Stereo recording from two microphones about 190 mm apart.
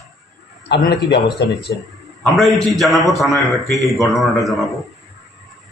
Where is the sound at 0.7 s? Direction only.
60° left (ahead or behind).